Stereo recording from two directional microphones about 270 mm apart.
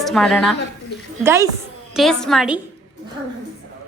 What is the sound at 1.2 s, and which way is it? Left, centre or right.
Speech, centre.